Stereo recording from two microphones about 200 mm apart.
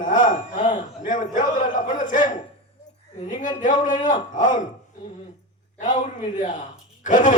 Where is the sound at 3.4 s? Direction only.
40° left (ahead or behind).